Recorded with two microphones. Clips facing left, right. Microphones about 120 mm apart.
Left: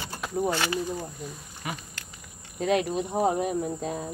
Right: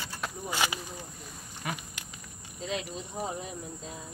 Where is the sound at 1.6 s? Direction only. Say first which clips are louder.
Left 1 dB; 5° left (ahead or behind).